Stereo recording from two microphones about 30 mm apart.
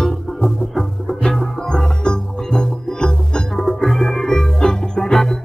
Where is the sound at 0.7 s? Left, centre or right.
Centre.